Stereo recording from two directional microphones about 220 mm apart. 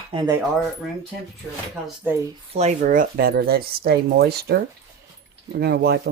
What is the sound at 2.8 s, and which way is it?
Speech, 40° right (ahead or behind).